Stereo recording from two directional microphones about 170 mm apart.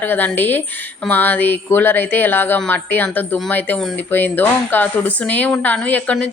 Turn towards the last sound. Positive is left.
turn(degrees=5)  # may be behind; listen again after turning